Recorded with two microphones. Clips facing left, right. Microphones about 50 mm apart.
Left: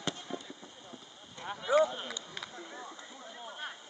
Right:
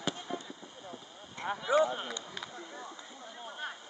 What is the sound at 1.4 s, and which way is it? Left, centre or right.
Clip-clop, right.